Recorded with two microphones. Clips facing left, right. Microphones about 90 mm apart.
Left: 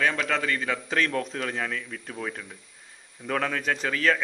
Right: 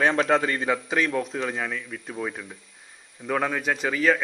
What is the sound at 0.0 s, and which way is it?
Speech, 30° right (ahead or behind).